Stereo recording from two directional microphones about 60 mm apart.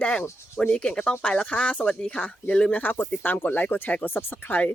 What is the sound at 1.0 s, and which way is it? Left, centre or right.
Speech, left.